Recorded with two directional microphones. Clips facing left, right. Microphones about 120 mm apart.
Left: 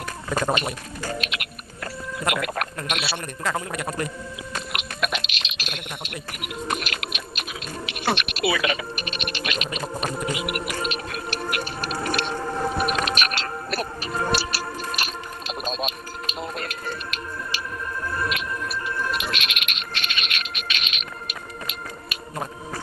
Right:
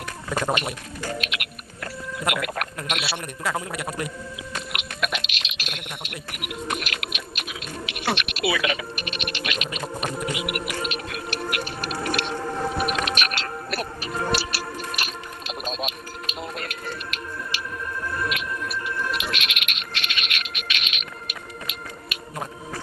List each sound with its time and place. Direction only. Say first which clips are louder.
0.3 s speech: left 1 dB; centre (ahead or behind)
1.0 s sheep: even; 35° left (ahead or behind)
2.3 s speech: left 2 dB; 35° left (ahead or behind)
3.4 s a man's voice: left 1 dB; 5° right (ahead or behind)
4.5 s a sound: left 2 dB; 35° left (ahead or behind)
7.9 s music: left 2 dB; 35° left (ahead or behind)
18.3 s a sound: even; 35° left (ahead or behind)